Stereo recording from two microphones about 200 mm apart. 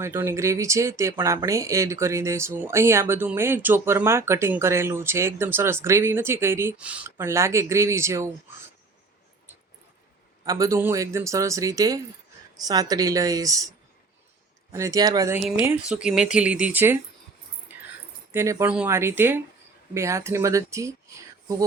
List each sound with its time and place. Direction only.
0.0 s speech: 10° right (ahead or behind)
10.4 s speech: 15° right (ahead or behind)
14.7 s speech: 15° right (ahead or behind)
15.4 s speech: 5° right (ahead or behind)
17.7 s a sound: 10° right (ahead or behind)
18.3 s speech: 10° right (ahead or behind)